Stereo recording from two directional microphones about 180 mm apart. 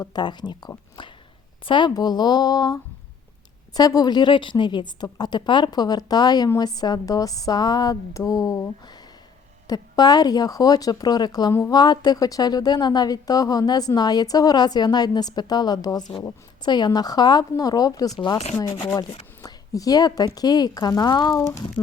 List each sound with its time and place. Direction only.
0.0 s speech: 25° left (ahead or behind)